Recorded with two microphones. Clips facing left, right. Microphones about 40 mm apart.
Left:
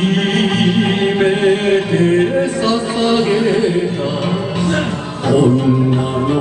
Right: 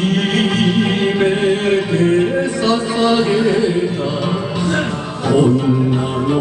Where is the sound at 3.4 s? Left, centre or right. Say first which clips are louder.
Left 1 dB; left.